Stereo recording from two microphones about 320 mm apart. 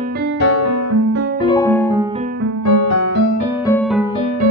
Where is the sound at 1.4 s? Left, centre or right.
Centre.